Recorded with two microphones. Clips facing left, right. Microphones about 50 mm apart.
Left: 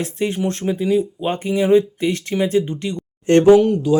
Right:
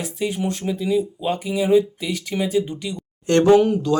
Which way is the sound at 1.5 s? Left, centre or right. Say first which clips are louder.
Left 3 dB; left.